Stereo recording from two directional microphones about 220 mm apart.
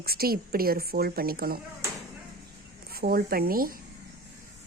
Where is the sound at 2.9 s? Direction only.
45° right (ahead or behind).